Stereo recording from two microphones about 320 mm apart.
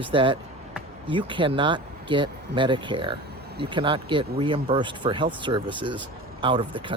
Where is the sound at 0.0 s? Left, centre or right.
Centre.